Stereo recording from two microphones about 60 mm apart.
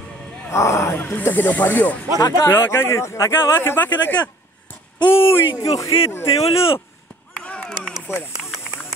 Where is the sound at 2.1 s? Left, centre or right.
Left.